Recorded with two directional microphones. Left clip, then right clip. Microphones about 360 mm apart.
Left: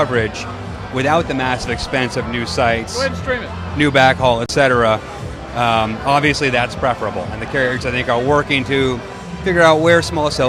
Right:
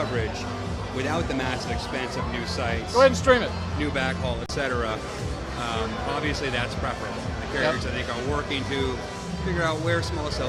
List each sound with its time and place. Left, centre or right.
0.0 s a man's voice: left
3.0 s speech: right
3.8 s a man's voice: left
7.9 s a man's voice: left